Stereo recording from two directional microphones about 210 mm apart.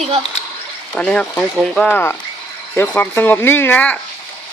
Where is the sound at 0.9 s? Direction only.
5° left (ahead or behind).